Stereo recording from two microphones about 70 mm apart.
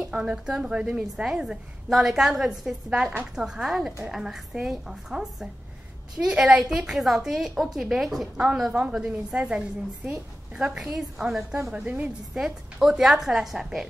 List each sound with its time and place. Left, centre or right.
0.0 s a woman's voice: centre
6.6 s a woman's voice: centre
11.7 s a woman's voice: centre
12.8 s a woman's voice: centre